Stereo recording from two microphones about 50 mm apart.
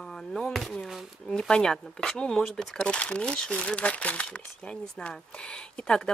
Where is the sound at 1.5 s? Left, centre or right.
Centre.